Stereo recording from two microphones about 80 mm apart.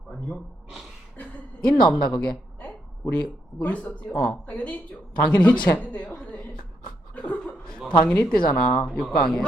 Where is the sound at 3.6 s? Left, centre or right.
Centre.